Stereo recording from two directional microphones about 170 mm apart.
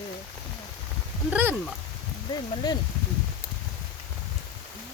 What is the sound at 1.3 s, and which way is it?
Speech, 10° right (ahead or behind).